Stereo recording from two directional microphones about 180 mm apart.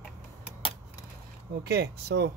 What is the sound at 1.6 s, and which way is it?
Speech, 65° right (ahead or behind).